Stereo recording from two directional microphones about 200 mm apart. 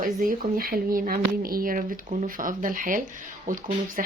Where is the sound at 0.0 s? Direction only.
45° right (ahead or behind).